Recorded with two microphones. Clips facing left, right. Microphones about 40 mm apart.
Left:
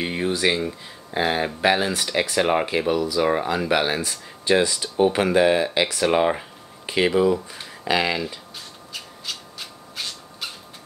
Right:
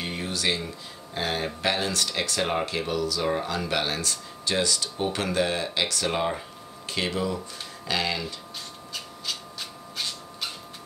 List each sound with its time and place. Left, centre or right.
0.0 s a sound: left
1.1 s speech: left
8.9 s rub: centre